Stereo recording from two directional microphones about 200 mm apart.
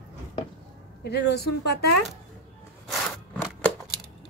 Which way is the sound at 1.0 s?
55° left (ahead or behind).